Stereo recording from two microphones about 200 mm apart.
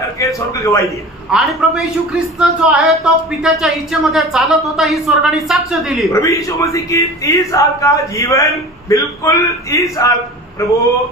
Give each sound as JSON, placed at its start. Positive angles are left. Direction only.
{"t": 0.2, "sound": "a man's voice", "side_deg": 15}
{"t": 1.3, "sound": "a man's voice", "side_deg": 0}
{"t": 6.0, "sound": "a man's voice", "side_deg": 15}